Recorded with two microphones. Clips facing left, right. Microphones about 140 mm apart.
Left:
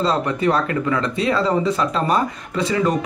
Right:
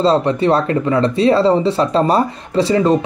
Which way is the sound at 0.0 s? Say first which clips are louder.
Right 5 dB; 30° right (ahead or behind).